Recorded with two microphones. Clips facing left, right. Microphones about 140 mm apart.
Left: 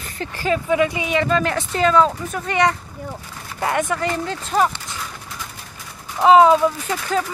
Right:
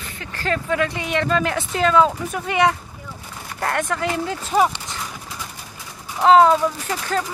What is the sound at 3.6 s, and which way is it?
Speech, 5° left (ahead or behind).